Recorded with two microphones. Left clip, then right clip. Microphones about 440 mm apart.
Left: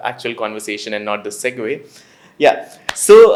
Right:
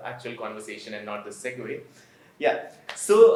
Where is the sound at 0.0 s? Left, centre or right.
Left.